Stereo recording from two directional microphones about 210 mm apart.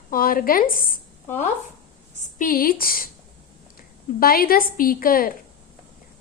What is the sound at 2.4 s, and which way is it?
Speech, 45° left (ahead or behind).